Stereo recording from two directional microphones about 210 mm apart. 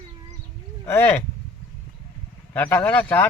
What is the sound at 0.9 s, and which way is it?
Speech, 10° left (ahead or behind).